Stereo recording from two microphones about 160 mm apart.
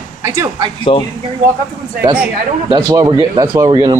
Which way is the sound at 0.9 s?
35° left (ahead or behind).